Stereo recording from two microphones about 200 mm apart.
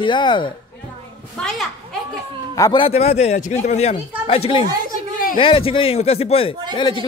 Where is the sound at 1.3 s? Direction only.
Centre (ahead or behind).